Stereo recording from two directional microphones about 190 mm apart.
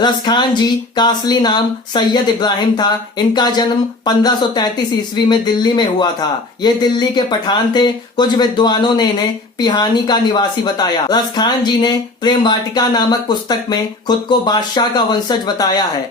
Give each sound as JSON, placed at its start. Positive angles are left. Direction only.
{"t": 0.0, "sound": "speech", "side_deg": 25}